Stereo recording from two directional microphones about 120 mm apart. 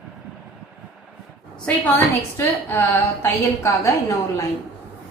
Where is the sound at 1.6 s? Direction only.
15° left (ahead or behind).